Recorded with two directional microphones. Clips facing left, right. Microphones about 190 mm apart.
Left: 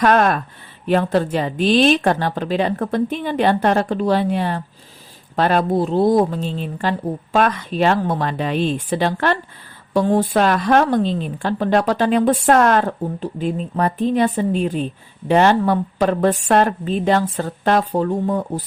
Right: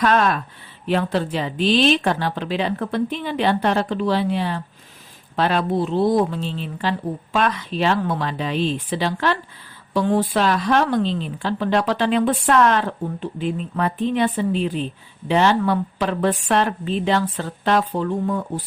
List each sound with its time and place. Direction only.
0.0 s a woman's voice: 50° left (ahead or behind)